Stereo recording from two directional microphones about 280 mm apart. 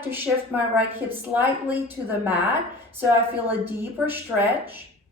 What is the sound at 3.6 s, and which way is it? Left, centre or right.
Speech, centre.